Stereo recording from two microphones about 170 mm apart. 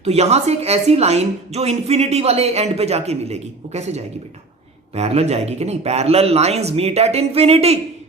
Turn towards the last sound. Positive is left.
turn(degrees=-35)  # may be behind; listen again after turning